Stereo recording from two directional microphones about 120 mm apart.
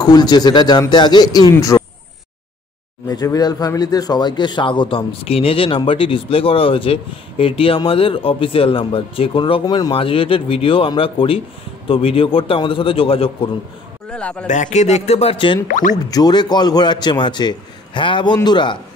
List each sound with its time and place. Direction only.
0.0 s a man's voice: 35° left (ahead or behind)
1.5 s speech: 20° left (ahead or behind)
3.1 s a man's voice: 30° left (ahead or behind)
9.9 s a man's voice: 50° left (ahead or behind)
14.1 s speech: 10° left (ahead or behind)
14.5 s speech: 80° left; by 15.6 s 45° left (ahead or behind)
16.1 s a man's voice: 35° left (ahead or behind)